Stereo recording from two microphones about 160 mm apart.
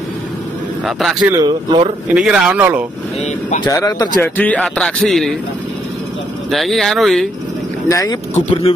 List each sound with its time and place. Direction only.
0.8 s a man's voice: centre (ahead or behind)
1.4 s speech: 30° right (ahead or behind)
2.1 s speech: 5° right (ahead or behind)
3.6 s speech: 25° left (ahead or behind)
4.2 s a man's voice: 10° left (ahead or behind)
6.5 s a man's voice: centre (ahead or behind)
7.9 s speech: 20° left (ahead or behind)
8.4 s speech: 45° left (ahead or behind)